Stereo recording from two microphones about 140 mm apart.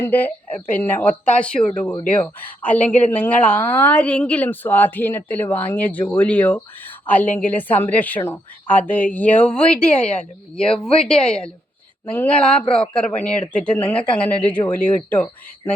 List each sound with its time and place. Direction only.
0.0 s a woman's voice: 15° left (ahead or behind)